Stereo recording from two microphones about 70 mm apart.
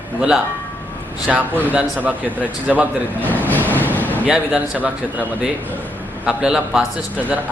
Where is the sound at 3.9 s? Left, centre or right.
Left.